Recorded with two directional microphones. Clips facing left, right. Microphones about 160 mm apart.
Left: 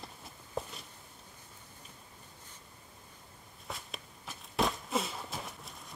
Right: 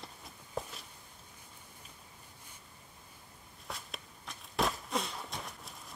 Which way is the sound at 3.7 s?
Centre (ahead or behind).